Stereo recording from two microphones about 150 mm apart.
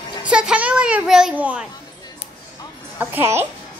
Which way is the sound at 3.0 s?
15° right (ahead or behind).